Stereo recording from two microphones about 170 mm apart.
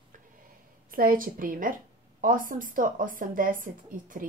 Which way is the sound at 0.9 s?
55° right (ahead or behind).